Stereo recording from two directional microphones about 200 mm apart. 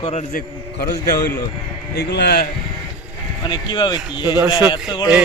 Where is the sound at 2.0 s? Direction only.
55° left (ahead or behind).